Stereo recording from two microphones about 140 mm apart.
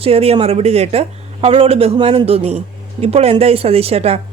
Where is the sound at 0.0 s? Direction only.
45° right (ahead or behind).